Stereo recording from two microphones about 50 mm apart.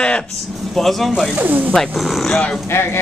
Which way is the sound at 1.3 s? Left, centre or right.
Right.